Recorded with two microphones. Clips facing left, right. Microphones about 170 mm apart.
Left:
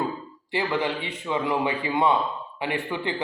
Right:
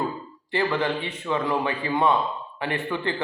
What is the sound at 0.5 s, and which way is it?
Speech, 15° left (ahead or behind).